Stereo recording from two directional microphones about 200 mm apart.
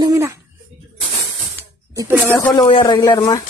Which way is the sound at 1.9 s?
10° right (ahead or behind).